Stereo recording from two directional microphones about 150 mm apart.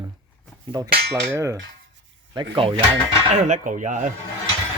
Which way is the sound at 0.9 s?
90° right.